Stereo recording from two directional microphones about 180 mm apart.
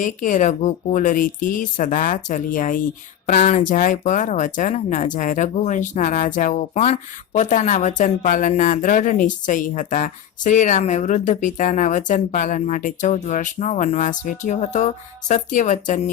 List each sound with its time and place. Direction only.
0.0 s speech: 45° left (ahead or behind)